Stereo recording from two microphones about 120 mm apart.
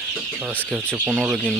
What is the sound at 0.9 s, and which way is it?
Speech, 15° right (ahead or behind).